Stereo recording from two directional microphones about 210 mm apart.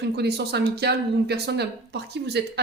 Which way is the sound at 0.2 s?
50° right (ahead or behind).